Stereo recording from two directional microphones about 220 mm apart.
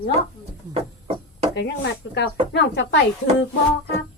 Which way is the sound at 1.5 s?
50° left (ahead or behind).